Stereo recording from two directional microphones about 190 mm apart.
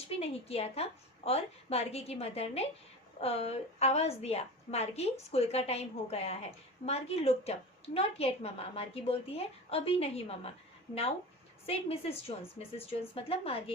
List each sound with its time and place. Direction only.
0.2 s a woman's voice: 30° left (ahead or behind)
11.6 s a woman's voice: 30° left (ahead or behind)